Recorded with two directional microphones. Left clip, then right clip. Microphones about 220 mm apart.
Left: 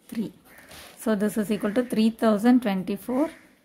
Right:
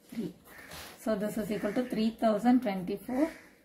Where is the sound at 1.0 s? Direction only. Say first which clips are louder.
Left 6 dB; 40° left (ahead or behind).